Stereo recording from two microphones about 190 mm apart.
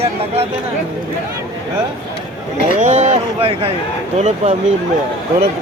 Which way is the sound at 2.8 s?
40° right (ahead or behind).